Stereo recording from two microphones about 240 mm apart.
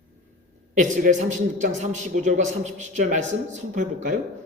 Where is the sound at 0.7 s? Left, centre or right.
Right.